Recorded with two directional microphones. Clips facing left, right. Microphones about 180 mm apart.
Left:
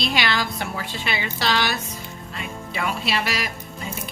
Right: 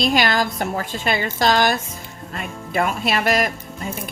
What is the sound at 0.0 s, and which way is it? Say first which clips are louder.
A woman's voice: right 5 dB; 45° right (ahead or behind).